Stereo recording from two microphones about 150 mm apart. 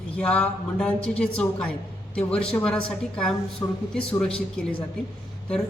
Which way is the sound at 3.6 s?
15° left (ahead or behind).